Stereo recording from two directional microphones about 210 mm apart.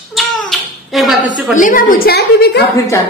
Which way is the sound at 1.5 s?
40° left (ahead or behind).